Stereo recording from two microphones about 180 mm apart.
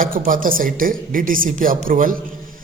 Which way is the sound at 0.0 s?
50° right (ahead or behind).